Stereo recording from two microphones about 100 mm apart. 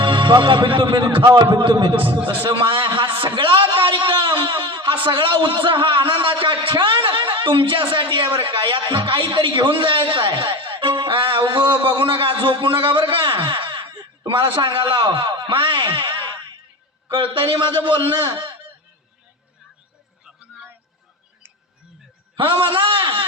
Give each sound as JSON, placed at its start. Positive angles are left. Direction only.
{"t": 0.0, "sound": "a man's voice", "side_deg": -55}
{"t": 2.4, "sound": "a sound", "side_deg": -55}
{"t": 5.0, "sound": "a man's voice", "side_deg": -55}
{"t": 22.4, "sound": "a man's voice", "side_deg": -60}